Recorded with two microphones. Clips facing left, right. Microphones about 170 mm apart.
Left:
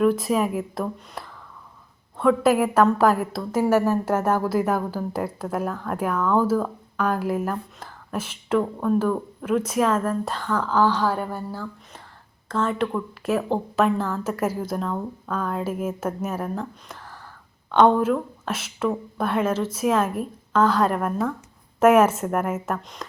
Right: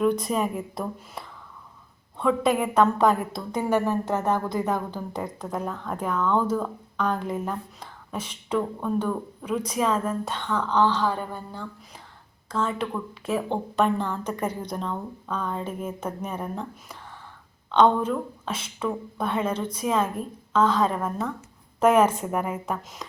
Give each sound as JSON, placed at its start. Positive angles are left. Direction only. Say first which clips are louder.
{"t": 0.0, "sound": "a woman's voice", "louder": "left 3 dB", "side_deg": 0}